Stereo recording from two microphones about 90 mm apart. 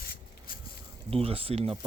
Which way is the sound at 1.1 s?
90° right.